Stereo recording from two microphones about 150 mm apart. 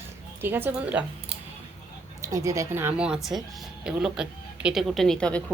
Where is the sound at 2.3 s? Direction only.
20° right (ahead or behind).